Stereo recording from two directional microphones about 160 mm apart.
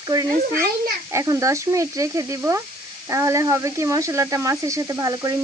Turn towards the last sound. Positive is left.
turn(degrees=-20)  # may be behind; listen again after turning